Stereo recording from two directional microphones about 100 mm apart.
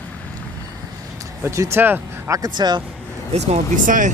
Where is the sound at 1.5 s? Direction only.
30° right (ahead or behind).